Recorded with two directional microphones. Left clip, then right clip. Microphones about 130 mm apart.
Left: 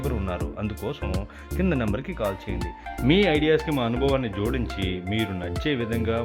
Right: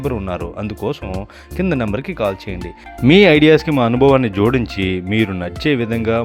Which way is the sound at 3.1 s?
60° right (ahead or behind).